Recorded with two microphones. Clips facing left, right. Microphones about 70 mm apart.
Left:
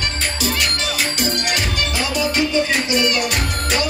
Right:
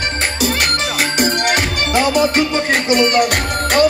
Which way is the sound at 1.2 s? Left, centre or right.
Right.